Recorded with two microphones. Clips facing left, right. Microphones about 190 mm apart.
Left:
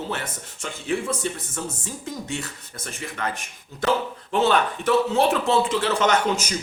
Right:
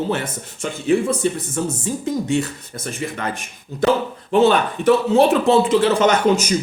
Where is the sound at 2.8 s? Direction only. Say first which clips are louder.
Right 5 dB; 20° right (ahead or behind).